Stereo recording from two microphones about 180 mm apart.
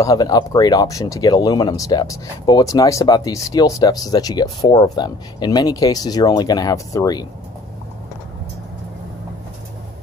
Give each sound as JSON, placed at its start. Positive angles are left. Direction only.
{"t": 0.0, "sound": "speech", "side_deg": 20}